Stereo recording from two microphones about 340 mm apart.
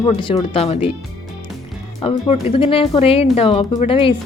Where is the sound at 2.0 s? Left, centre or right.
Centre.